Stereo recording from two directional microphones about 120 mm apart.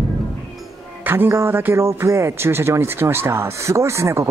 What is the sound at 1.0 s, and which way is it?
A man's voice, 20° right (ahead or behind).